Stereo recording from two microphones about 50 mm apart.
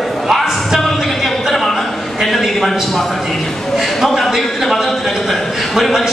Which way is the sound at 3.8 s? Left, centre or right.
Centre.